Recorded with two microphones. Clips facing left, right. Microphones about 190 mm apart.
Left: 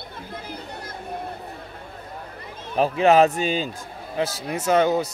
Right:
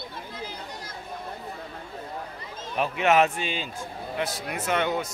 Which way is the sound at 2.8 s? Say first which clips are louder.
Left 5 dB; 35° left (ahead or behind).